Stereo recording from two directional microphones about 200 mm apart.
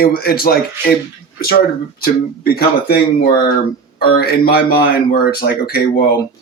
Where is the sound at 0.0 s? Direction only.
50° left (ahead or behind).